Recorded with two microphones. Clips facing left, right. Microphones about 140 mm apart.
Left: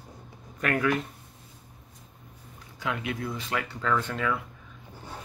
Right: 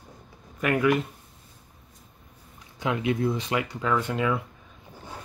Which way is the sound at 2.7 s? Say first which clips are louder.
Right 6 dB; 20° right (ahead or behind).